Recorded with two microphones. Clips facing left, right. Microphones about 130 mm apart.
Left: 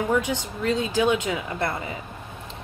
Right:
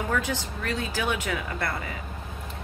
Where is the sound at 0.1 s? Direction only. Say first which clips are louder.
Left 4 dB; 20° left (ahead or behind).